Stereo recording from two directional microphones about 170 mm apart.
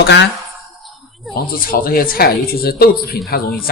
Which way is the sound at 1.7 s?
60° left (ahead or behind).